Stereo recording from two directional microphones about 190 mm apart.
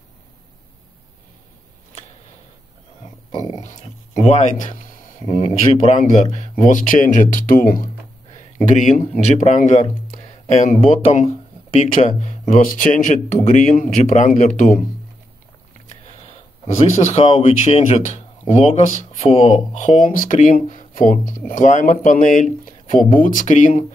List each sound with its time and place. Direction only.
3.3 s a sound: 20° left (ahead or behind)
3.6 s speech: 40° left (ahead or behind)
15.9 s speech: 35° left (ahead or behind)